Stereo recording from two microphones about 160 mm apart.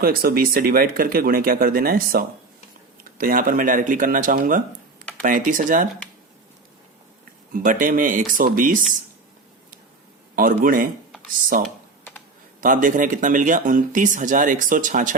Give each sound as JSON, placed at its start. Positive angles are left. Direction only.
{"t": 0.0, "sound": "speech", "side_deg": -70}
{"t": 7.5, "sound": "speech", "side_deg": -55}
{"t": 10.3, "sound": "speech", "side_deg": -60}